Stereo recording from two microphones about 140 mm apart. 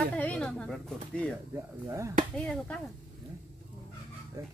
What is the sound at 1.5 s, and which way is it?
Speech, 20° right (ahead or behind).